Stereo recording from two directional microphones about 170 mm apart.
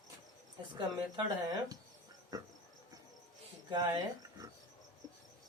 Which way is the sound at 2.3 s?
20° right (ahead or behind).